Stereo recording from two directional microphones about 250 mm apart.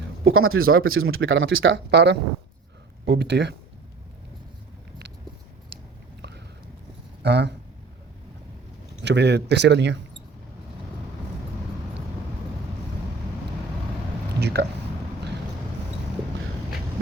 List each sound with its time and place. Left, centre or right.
0.3 s speech: right
7.2 s speech: right
9.0 s speech: right
14.3 s a sound: right